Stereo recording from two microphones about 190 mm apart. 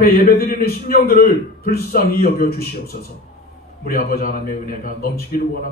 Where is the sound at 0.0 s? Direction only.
55° left (ahead or behind).